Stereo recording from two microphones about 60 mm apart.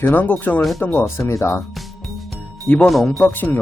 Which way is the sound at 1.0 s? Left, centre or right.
Left.